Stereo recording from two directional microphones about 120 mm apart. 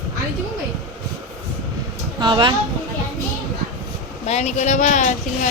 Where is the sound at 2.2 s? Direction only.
40° right (ahead or behind).